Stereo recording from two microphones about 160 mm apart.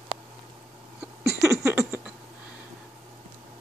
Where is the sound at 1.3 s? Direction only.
20° right (ahead or behind).